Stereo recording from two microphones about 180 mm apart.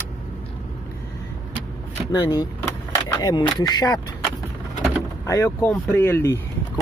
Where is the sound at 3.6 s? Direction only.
25° left (ahead or behind).